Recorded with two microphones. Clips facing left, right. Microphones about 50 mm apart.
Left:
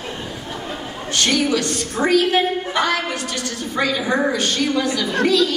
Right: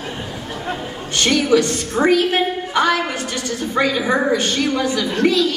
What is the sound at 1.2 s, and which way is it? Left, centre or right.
A woman's voice, centre.